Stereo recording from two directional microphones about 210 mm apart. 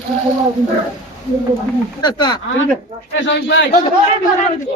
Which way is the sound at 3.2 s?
55° left (ahead or behind).